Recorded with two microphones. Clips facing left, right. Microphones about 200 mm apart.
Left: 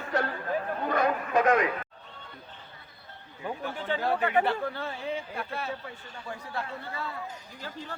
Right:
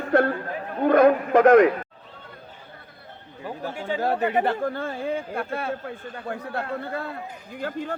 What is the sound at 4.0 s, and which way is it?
Speech, 45° right (ahead or behind).